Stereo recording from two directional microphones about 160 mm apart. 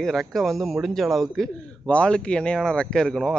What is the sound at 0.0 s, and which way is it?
A man's voice, centre (ahead or behind).